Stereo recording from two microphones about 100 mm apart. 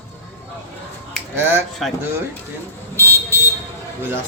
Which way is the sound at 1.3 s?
20° right (ahead or behind).